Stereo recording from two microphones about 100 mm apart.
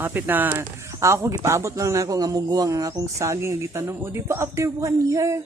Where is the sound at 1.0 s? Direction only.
30° right (ahead or behind).